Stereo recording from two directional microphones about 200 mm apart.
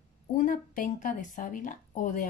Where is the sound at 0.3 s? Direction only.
40° left (ahead or behind).